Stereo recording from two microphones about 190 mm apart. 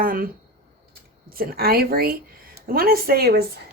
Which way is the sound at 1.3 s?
50° right (ahead or behind).